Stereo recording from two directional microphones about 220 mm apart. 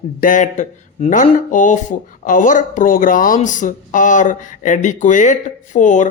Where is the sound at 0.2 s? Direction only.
35° left (ahead or behind).